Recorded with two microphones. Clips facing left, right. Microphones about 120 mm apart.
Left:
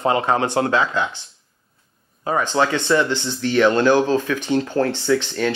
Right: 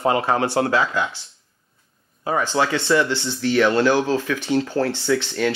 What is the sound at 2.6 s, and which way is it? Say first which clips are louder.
Speech: left 2 dB; 35° left (ahead or behind).